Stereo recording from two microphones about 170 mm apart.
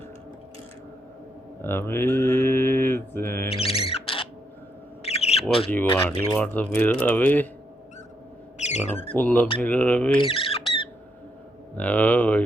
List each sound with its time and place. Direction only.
1.6 s mantra: 15° left (ahead or behind)
3.5 s music: 35° left (ahead or behind)
5.0 s bird: 35° left (ahead or behind)
6.1 s mantra: 10° left (ahead or behind)
8.5 s a sound: 45° left (ahead or behind)
9.1 s mantra: 10° left (ahead or behind)
10.2 s speech: 35° left (ahead or behind)
11.8 s mantra: 10° left (ahead or behind)